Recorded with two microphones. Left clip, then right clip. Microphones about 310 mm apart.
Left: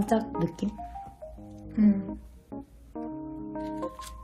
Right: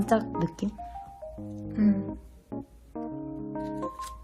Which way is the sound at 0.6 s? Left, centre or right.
Centre.